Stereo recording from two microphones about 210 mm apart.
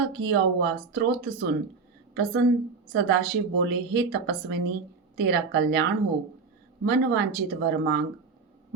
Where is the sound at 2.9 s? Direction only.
60° right (ahead or behind).